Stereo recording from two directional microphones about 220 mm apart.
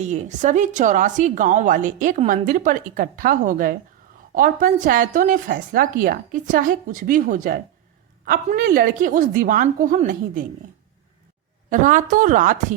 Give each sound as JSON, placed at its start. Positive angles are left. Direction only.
{"t": 0.0, "sound": "a woman's voice", "side_deg": -35}
{"t": 11.7, "sound": "a woman's voice", "side_deg": -35}